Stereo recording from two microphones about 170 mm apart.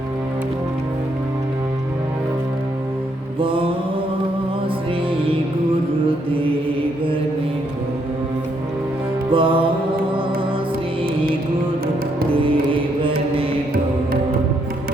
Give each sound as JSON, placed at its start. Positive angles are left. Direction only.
{"t": 3.4, "sound": "mantra", "side_deg": -30}
{"t": 9.3, "sound": "music", "side_deg": -30}